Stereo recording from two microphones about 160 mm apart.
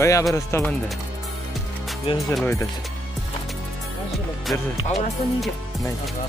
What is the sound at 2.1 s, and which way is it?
Speech, 35° left (ahead or behind).